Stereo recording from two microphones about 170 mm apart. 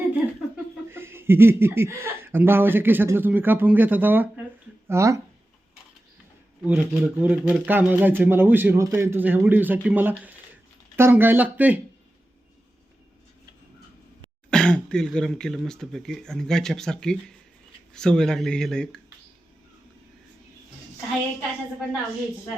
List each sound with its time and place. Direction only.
0.1 s laughter: 10° right (ahead or behind)
4.9 s speech: 15° right (ahead or behind)
6.7 s speech: 10° right (ahead or behind)
14.5 s speech: 5° left (ahead or behind)